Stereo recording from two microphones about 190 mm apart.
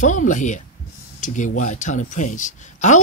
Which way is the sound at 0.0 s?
40° left (ahead or behind).